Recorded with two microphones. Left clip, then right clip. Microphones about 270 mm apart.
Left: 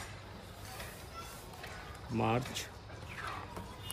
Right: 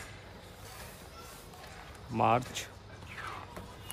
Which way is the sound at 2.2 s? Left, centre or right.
Right.